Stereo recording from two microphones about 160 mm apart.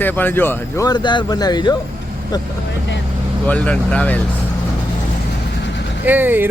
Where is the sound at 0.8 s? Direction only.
30° left (ahead or behind).